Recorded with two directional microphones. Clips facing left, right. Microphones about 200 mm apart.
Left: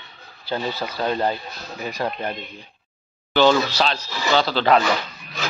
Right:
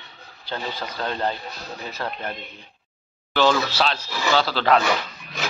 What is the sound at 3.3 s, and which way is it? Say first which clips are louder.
Speech: left 3 dB; centre (ahead or behind).